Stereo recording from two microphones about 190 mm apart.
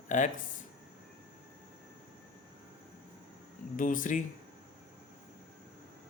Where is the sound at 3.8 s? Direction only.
45° left (ahead or behind).